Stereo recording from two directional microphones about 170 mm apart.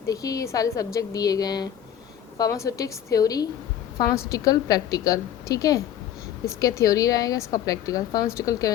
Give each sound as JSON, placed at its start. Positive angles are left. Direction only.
{"t": 0.0, "sound": "a woman's voice", "side_deg": 20}